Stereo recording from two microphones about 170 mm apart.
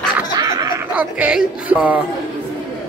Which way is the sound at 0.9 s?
10° right (ahead or behind).